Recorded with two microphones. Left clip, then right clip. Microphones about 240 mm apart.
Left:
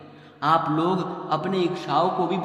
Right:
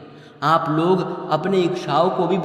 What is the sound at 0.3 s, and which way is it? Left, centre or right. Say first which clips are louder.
A man's voice: right 3 dB; right.